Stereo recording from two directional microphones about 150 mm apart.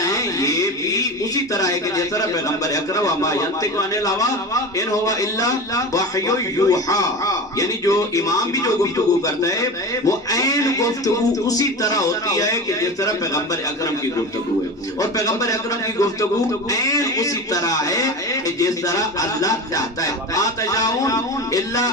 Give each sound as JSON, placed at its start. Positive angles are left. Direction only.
{"t": 0.0, "sound": "a sound", "side_deg": 25}
{"t": 2.7, "sound": "a man's voice", "side_deg": 25}
{"t": 15.0, "sound": "a man's voice", "side_deg": 25}
{"t": 16.8, "sound": "a man's voice", "side_deg": 25}